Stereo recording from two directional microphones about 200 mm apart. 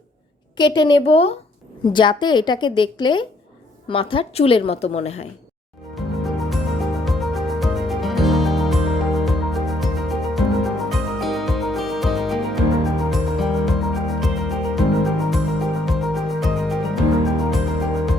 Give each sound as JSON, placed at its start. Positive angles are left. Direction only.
{"t": 0.5, "sound": "a woman's voice", "side_deg": 20}
{"t": 6.2, "sound": "music", "side_deg": 0}